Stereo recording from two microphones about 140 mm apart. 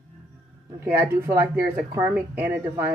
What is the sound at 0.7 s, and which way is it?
A woman's voice, 20° right (ahead or behind).